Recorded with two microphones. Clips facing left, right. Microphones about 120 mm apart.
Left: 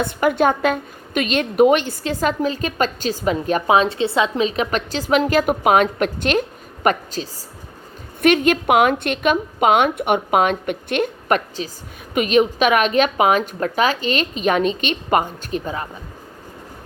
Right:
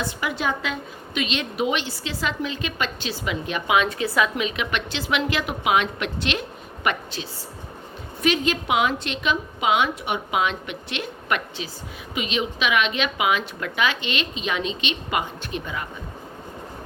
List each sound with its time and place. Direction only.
0.0 s a woman's voice: 50° left (ahead or behind)
8.2 s a woman's voice: 55° left (ahead or behind); by 11.7 s 40° left (ahead or behind)
12.1 s a woman's voice: 50° left (ahead or behind)